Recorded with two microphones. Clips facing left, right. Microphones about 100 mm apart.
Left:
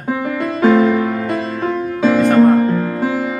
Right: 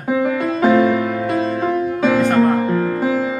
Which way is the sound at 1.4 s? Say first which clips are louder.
Right 2 dB; 25° right (ahead or behind).